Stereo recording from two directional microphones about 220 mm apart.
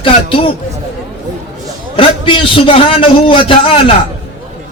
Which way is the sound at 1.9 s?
25° left (ahead or behind).